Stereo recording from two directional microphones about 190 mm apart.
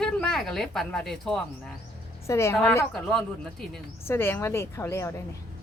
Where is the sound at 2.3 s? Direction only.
15° left (ahead or behind).